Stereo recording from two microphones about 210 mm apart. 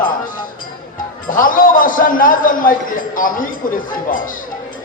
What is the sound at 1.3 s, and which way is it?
A man's voice, 40° left (ahead or behind).